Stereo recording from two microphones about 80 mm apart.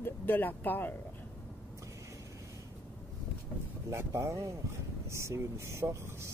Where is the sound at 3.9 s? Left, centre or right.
Right.